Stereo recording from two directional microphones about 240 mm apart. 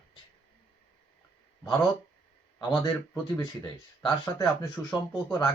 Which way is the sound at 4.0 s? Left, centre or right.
Centre.